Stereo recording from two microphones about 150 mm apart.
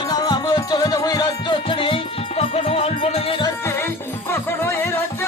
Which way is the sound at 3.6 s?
15° left (ahead or behind).